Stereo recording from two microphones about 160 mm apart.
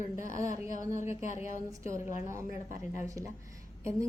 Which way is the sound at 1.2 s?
50° left (ahead or behind).